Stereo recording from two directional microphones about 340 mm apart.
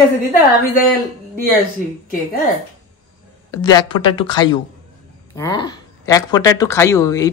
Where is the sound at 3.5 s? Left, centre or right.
Centre.